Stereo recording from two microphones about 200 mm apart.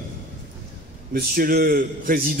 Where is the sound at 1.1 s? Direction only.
45° right (ahead or behind).